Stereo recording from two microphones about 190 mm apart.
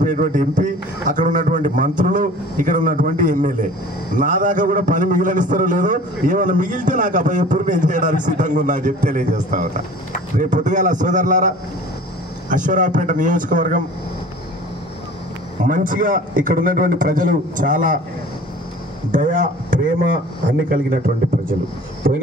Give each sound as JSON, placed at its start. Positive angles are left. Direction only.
{"t": 0.0, "sound": "a man's voice", "side_deg": -40}
{"t": 15.6, "sound": "a man's voice", "side_deg": -45}
{"t": 19.1, "sound": "a man's voice", "side_deg": -45}